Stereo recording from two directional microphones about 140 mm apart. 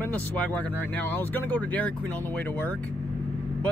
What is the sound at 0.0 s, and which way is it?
Speech, 10° left (ahead or behind).